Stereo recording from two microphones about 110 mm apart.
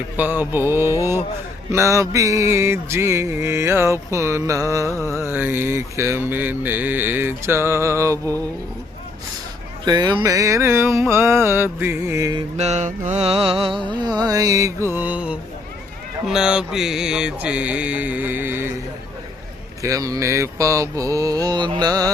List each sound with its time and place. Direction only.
0.2 s mantra: 15° right (ahead or behind)
9.8 s mantra: 40° right (ahead or behind)
12.5 s mantra: 90° right; by 13.8 s 55° right (ahead or behind)
14.0 s mantra: 40° right (ahead or behind); by 18.7 s 20° right (ahead or behind)
19.8 s mantra: 30° right (ahead or behind)